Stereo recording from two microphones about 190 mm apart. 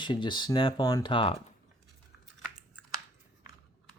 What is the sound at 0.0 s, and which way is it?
Speech, 25° left (ahead or behind).